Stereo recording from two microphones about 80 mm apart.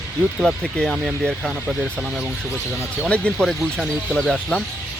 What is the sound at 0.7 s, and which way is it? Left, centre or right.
Speech, centre.